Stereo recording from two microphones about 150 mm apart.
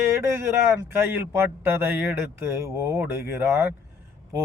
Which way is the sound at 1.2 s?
15° right (ahead or behind).